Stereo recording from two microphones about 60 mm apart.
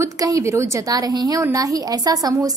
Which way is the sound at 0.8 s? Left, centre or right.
Right.